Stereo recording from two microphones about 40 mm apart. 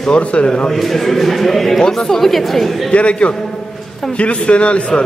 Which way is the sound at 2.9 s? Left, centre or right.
Left.